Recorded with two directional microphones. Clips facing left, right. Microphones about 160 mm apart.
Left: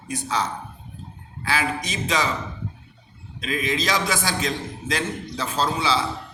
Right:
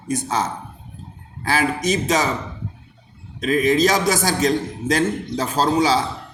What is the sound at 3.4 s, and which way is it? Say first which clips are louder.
A man's voice: right 9 dB; 45° right (ahead or behind).